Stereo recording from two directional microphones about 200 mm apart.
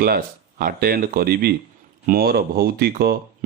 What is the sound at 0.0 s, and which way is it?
Speech, 45° right (ahead or behind).